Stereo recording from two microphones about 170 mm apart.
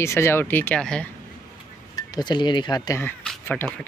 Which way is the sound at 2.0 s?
25° left (ahead or behind).